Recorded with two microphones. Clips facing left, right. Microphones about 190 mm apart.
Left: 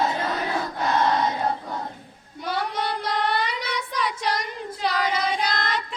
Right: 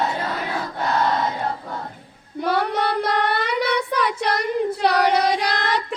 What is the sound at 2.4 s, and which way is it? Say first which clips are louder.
Child singing: right 6 dB; 60° right (ahead or behind).